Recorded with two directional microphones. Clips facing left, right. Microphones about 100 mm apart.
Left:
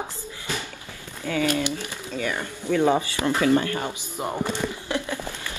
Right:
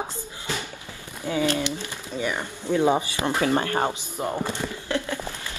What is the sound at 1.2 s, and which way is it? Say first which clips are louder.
Speech: even; 20° right (ahead or behind).